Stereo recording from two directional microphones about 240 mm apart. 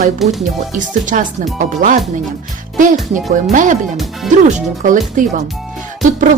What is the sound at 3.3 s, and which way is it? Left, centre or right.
Speech, right.